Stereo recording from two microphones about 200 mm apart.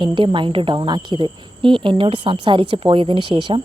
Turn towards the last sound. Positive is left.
turn(degrees=-25)  # may be behind; listen again after turning